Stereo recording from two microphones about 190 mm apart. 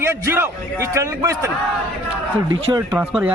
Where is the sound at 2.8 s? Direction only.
10° right (ahead or behind).